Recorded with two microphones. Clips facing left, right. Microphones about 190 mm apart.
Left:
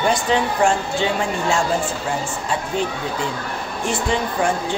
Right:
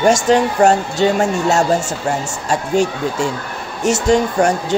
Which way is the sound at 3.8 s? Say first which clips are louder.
Right 8 dB; 45° right (ahead or behind).